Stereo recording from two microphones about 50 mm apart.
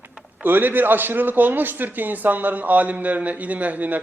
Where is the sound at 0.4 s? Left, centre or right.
Right.